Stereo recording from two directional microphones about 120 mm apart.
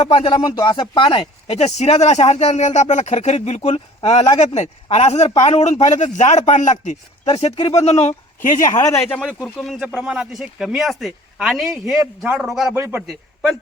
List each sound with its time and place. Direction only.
0.0 s speech: 45° left (ahead or behind)
1.8 s speech: 65° left (ahead or behind); by 6.9 s 90° left
7.3 s speech: 55° left (ahead or behind)
7.8 s speech: 65° left (ahead or behind); by 8.7 s 90° left
8.7 s speech: 25° left (ahead or behind)
9.2 s speech: centre (ahead or behind)
12.7 s a man's voice: 20° right (ahead or behind)
13.0 s speech: centre (ahead or behind)